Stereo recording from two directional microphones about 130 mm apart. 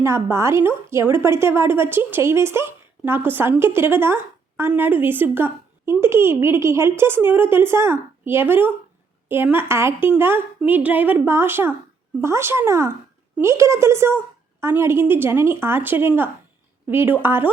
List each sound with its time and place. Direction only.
0.0 s a woman's voice: 20° right (ahead or behind)